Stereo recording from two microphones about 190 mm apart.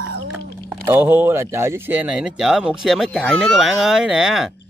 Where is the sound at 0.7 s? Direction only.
10° right (ahead or behind).